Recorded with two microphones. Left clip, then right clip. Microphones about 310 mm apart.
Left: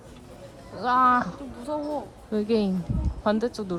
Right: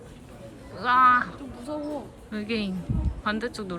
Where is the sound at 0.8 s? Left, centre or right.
Centre.